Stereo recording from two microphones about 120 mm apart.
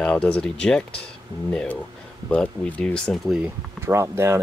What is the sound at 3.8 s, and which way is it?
Speech, 25° right (ahead or behind).